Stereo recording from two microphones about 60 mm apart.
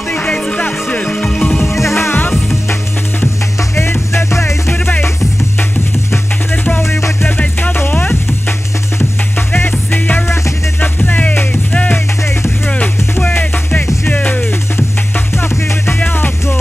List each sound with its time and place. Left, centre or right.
0.1 s music: left
2.0 s music: left
3.7 s music: left
6.5 s music: left
6.8 s music: left
7.2 s music: left
10.2 s music: left
11.1 s music: left
15.3 s music: left
16.0 s music: left